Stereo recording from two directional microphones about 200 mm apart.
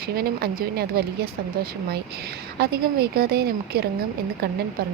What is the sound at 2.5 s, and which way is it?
A woman's voice, 50° right (ahead or behind).